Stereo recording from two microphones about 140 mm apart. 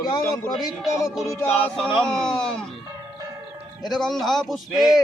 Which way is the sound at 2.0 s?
5° left (ahead or behind).